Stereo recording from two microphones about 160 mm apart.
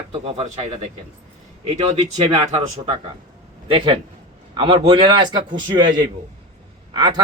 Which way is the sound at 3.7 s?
35° right (ahead or behind).